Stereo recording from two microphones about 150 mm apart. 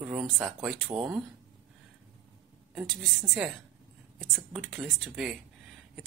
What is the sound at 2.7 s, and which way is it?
Speech, centre (ahead or behind).